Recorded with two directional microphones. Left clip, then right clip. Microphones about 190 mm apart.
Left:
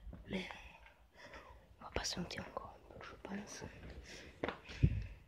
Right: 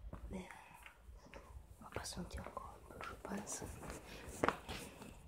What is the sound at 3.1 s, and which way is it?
Whispering, 20° left (ahead or behind).